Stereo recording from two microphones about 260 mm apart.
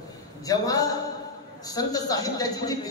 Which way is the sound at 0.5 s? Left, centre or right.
Centre.